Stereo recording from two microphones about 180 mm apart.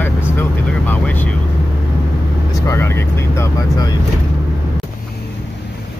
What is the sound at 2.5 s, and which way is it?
Speech, 15° left (ahead or behind).